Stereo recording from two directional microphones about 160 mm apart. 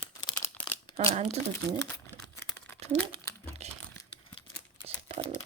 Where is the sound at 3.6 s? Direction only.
45° right (ahead or behind).